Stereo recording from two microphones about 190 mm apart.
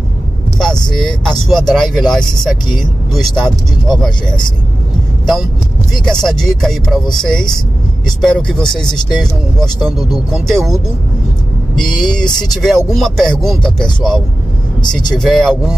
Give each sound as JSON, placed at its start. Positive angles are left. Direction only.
{"t": 0.6, "sound": "vehicle", "side_deg": 5}
{"t": 1.0, "sound": "speech", "side_deg": 5}
{"t": 5.2, "sound": "speech", "side_deg": 0}
{"t": 11.9, "sound": "vehicle", "side_deg": 25}
{"t": 12.6, "sound": "speech", "side_deg": 0}